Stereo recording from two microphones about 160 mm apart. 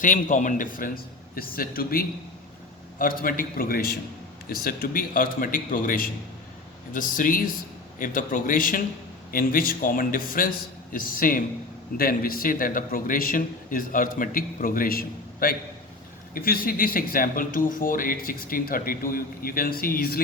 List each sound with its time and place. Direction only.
0.0 s speech: 55° left (ahead or behind)